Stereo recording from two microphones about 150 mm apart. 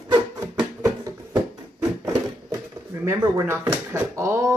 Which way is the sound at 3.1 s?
20° right (ahead or behind).